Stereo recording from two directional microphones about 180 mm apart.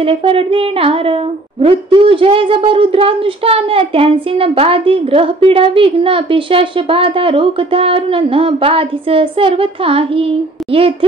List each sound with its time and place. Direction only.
0.0 s a woman's voice: 30° right (ahead or behind)